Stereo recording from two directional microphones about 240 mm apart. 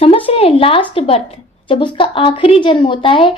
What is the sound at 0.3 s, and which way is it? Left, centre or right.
A woman's voice, left.